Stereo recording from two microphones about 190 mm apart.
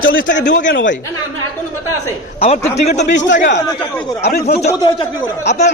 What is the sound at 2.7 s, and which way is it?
Speech, 35° left (ahead or behind).